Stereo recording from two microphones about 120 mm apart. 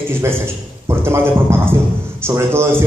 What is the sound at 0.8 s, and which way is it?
A man's voice, 20° right (ahead or behind).